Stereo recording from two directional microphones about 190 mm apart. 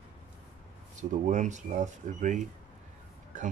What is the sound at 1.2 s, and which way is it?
Speech, 40° right (ahead or behind).